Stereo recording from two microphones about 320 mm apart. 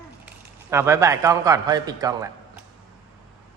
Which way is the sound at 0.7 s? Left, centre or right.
Centre.